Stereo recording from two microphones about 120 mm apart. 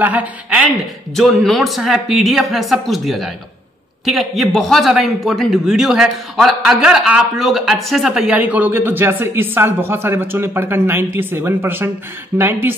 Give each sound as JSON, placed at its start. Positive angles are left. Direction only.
{"t": 0.0, "sound": "a man's voice", "side_deg": -15}
{"t": 1.1, "sound": "a man's voice", "side_deg": 0}